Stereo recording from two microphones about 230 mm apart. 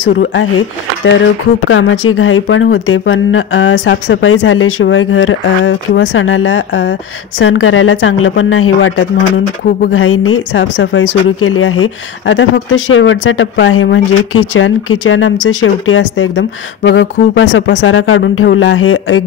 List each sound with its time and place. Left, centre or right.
0.2 s speech: left
1.7 s speech: left